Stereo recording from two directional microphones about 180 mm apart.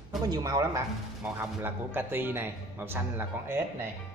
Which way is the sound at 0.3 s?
20° right (ahead or behind).